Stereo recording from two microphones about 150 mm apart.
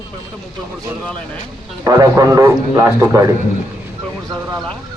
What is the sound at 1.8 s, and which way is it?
A man's voice, 25° right (ahead or behind).